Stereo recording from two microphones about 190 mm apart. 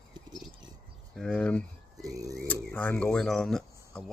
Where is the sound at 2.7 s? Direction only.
10° left (ahead or behind).